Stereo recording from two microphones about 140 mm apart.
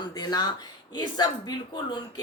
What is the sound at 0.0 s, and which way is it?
Speech, 30° left (ahead or behind).